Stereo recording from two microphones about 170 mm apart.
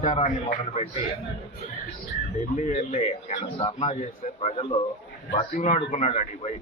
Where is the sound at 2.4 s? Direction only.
45° left (ahead or behind).